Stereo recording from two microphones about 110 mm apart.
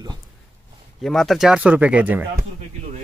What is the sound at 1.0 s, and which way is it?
Speech, centre (ahead or behind).